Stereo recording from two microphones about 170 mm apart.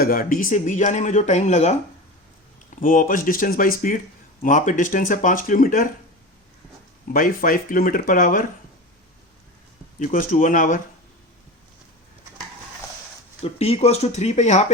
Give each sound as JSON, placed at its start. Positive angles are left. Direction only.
{"t": 0.0, "sound": "speech", "side_deg": 55}
{"t": 7.1, "sound": "speech", "side_deg": 55}
{"t": 10.0, "sound": "speech", "side_deg": 55}
{"t": 13.4, "sound": "speech", "side_deg": 35}